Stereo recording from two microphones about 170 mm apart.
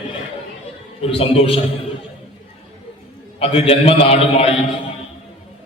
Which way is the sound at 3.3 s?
35° left (ahead or behind).